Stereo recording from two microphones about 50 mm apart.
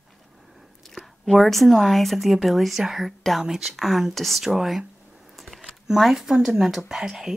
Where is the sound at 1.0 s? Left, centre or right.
Centre.